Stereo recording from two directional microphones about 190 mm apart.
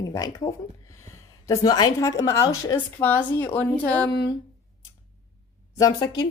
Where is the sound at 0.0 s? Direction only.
20° left (ahead or behind).